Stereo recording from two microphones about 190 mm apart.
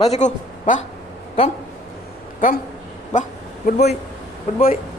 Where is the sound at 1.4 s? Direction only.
30° left (ahead or behind).